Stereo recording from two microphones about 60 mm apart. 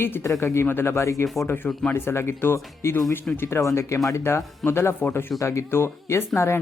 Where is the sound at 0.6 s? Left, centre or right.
Left.